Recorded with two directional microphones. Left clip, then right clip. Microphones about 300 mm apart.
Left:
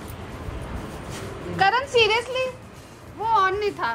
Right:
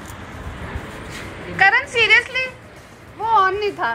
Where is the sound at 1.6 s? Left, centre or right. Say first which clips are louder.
Right 4 dB; centre.